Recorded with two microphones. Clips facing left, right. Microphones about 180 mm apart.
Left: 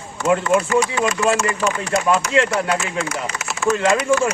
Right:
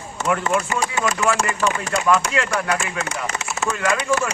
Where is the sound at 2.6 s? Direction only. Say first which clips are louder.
Left 2 dB; 30° left (ahead or behind).